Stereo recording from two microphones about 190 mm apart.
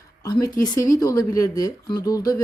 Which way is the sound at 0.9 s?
20° left (ahead or behind).